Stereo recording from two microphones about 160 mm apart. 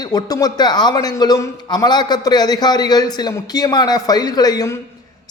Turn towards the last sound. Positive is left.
turn(degrees=20)  # may be behind; listen again after turning